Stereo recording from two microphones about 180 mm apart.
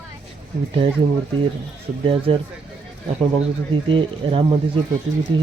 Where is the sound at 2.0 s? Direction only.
30° right (ahead or behind).